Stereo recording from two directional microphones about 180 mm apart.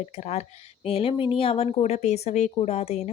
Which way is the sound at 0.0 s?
40° left (ahead or behind).